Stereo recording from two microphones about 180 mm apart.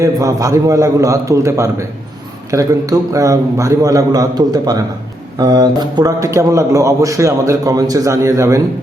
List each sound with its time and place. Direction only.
0.0 s a man's voice: 20° right (ahead or behind)